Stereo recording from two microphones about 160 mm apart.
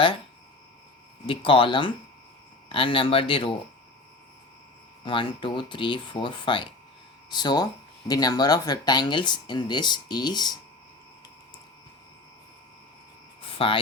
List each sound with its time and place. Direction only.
1.3 s speech: 30° left (ahead or behind)
5.0 s speech: 30° left (ahead or behind)
13.4 s hum: 35° left (ahead or behind)